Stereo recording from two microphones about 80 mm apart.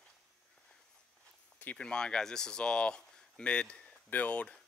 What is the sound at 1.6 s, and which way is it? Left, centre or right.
Speech, centre.